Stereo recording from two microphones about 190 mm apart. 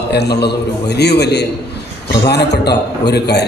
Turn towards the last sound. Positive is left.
turn(degrees=60)  # may be behind; listen again after turning